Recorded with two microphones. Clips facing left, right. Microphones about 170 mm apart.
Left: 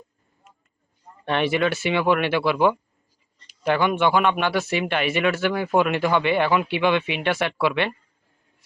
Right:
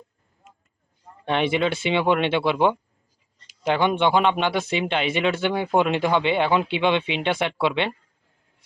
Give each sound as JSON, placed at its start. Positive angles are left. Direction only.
{"t": 1.2, "sound": "speech", "side_deg": -15}